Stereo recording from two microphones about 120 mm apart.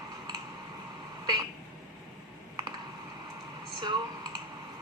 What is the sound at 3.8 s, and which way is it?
Computer keyboard, 40° right (ahead or behind).